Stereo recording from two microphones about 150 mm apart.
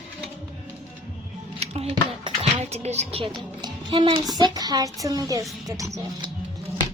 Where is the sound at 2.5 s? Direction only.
45° right (ahead or behind).